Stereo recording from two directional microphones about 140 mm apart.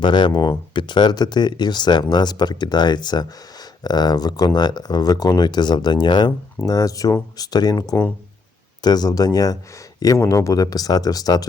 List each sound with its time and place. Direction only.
0.0 s speech: 35° left (ahead or behind)